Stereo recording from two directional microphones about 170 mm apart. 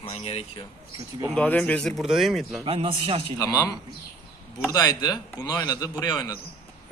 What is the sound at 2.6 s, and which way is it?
Speech, 35° right (ahead or behind).